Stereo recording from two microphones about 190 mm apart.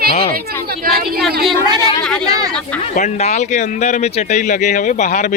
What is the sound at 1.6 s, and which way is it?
Speech, 20° right (ahead or behind).